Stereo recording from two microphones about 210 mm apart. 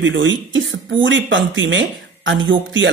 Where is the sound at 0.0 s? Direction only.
65° right (ahead or behind).